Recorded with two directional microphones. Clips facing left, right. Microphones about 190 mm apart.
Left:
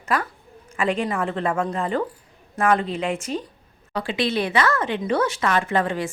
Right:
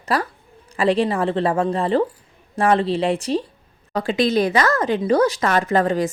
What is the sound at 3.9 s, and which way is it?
Speech, 45° right (ahead or behind).